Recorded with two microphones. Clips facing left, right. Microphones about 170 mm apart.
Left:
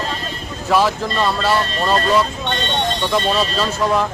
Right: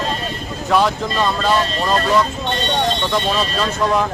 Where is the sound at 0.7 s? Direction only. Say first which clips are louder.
Even; centre (ahead or behind).